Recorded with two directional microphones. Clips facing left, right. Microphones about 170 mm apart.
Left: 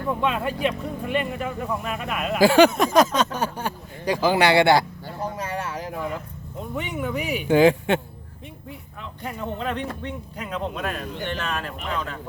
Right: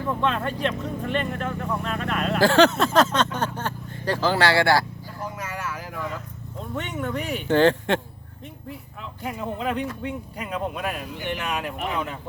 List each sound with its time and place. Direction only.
0.1 s speech: 10° left (ahead or behind)
5.2 s a sound: 30° left (ahead or behind)
6.6 s speech: 10° left (ahead or behind)
9.2 s speech: 5° right (ahead or behind)